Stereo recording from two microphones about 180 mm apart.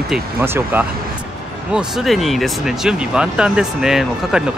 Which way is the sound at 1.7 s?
Centre (ahead or behind).